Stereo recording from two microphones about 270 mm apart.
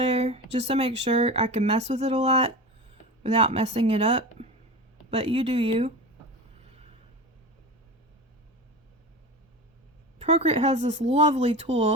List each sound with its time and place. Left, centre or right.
0.0 s speech: right
10.2 s speech: right